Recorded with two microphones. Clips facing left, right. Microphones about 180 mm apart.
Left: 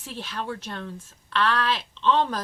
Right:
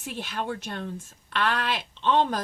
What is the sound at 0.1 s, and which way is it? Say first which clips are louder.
Speech: right 1 dB; 20° right (ahead or behind).